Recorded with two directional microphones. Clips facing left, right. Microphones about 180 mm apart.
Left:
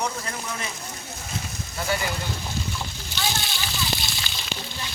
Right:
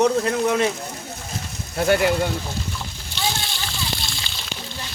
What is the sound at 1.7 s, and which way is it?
Speech, 65° right (ahead or behind).